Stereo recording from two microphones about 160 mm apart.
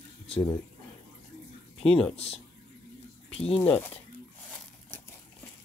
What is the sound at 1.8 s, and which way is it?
Speech, 5° left (ahead or behind).